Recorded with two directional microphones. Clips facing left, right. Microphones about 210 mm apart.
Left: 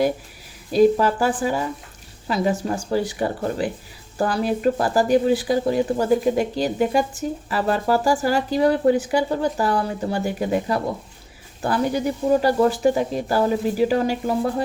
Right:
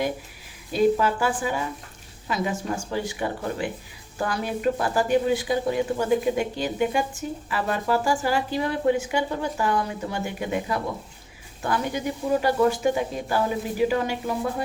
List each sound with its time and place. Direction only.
0.7 s speech: 40° left (ahead or behind)